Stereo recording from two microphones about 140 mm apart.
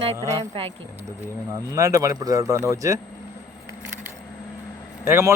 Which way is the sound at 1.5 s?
25° right (ahead or behind).